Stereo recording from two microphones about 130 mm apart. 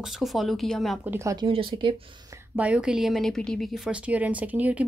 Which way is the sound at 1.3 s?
40° right (ahead or behind).